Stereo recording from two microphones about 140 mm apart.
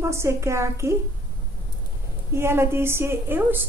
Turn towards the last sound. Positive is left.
turn(degrees=-15)  # may be behind; listen again after turning